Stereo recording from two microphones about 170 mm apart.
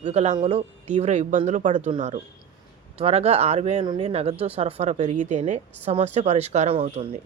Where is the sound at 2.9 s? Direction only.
35° right (ahead or behind).